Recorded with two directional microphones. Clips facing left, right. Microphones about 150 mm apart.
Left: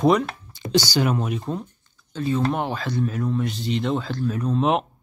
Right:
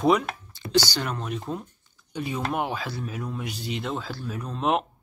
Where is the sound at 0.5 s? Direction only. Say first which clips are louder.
Left 2 dB; 15° left (ahead or behind).